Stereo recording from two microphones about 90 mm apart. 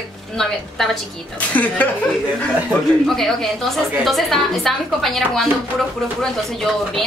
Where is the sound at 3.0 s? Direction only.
5° left (ahead or behind).